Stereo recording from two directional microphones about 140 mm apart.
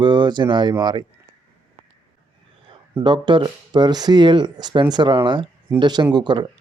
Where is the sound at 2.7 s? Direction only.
35° right (ahead or behind).